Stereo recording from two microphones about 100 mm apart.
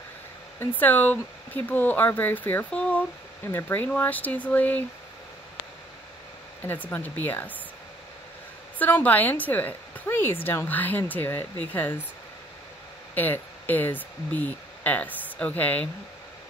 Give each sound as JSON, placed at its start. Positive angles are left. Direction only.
{"t": 0.6, "sound": "speech", "side_deg": 20}
{"t": 6.6, "sound": "speech", "side_deg": 20}
{"t": 8.7, "sound": "speech", "side_deg": 15}
{"t": 13.1, "sound": "speech", "side_deg": 20}